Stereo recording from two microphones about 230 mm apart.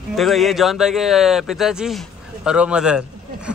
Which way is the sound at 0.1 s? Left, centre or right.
Centre.